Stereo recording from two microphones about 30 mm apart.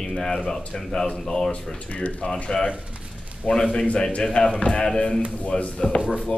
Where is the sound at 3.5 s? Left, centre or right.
Left.